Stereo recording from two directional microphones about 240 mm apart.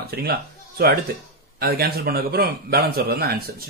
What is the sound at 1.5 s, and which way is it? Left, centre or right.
Speech, right.